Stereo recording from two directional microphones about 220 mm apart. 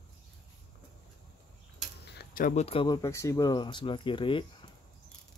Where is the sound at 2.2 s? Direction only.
40° left (ahead or behind); by 4.4 s 20° left (ahead or behind).